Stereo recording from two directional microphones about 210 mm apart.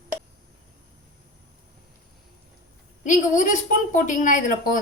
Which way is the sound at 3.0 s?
35° left (ahead or behind).